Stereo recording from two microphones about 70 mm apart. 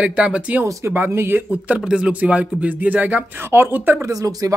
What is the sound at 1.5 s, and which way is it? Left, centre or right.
Speech, centre.